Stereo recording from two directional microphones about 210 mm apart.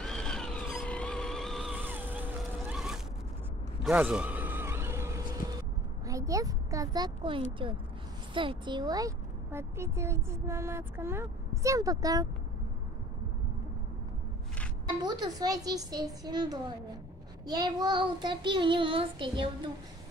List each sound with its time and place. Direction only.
0.0 s a sound: 5° left (ahead or behind); by 5.4 s 15° right (ahead or behind)
6.0 s speech: 15° right (ahead or behind)
15.0 s child singing: 20° right (ahead or behind)